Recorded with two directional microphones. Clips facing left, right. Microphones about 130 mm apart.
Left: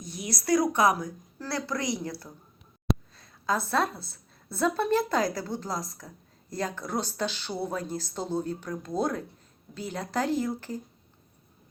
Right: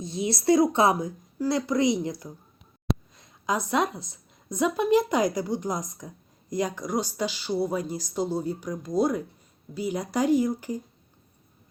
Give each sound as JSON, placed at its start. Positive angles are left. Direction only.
{"t": 0.0, "sound": "a woman's voice", "side_deg": -25}